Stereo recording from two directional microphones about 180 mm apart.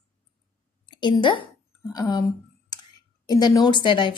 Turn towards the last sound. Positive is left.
turn(degrees=25)  # may be behind; listen again after turning